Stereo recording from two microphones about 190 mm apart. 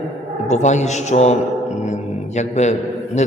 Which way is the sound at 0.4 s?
40° left (ahead or behind).